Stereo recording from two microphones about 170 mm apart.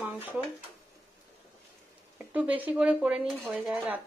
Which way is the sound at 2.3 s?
10° right (ahead or behind).